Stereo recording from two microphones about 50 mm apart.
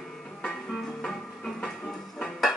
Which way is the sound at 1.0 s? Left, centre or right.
Centre.